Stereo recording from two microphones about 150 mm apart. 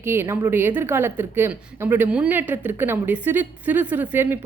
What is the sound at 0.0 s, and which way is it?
A woman's voice, 15° right (ahead or behind).